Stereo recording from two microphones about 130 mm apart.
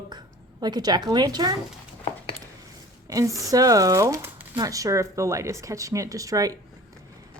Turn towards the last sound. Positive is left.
turn(degrees=-25)  # may be behind; listen again after turning